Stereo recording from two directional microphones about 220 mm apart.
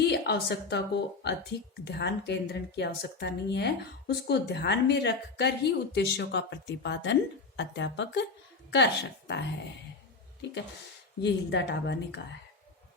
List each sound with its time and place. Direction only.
0.0 s a woman's voice: 50° left (ahead or behind)
11.2 s a woman's voice: 50° left (ahead or behind)